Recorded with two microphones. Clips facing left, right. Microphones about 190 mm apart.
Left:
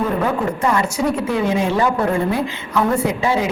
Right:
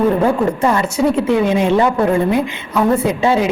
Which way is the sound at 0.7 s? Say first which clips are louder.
Right 3 dB; 25° right (ahead or behind).